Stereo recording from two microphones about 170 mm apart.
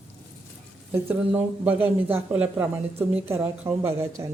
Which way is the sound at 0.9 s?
10° right (ahead or behind).